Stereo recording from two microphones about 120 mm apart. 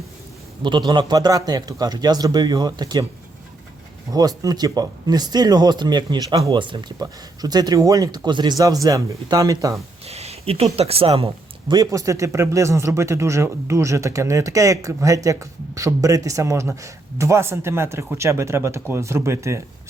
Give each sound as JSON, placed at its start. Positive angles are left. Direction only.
{"t": 0.6, "sound": "speech", "side_deg": -40}
{"t": 4.1, "sound": "speech", "side_deg": -30}
{"t": 10.1, "sound": "speech", "side_deg": -60}
{"t": 11.7, "sound": "speech", "side_deg": -30}